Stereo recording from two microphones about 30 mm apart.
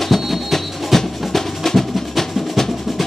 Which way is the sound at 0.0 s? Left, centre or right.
Centre.